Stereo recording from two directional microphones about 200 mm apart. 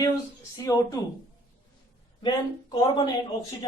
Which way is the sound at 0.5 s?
15° left (ahead or behind).